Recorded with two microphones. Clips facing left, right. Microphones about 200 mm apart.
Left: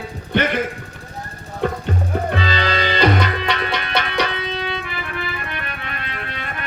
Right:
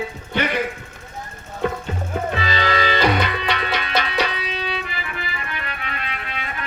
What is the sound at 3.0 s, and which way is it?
Tabla, 60° left (ahead or behind).